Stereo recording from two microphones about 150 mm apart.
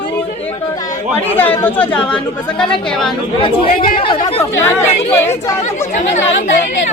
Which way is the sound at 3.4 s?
40° left (ahead or behind).